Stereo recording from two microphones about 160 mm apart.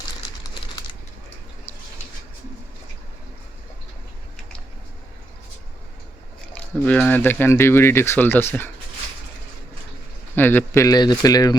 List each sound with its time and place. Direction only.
6.5 s speech: 10° left (ahead or behind)
10.3 s speech: 10° left (ahead or behind)